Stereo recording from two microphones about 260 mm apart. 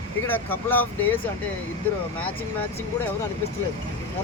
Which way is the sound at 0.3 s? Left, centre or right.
Centre.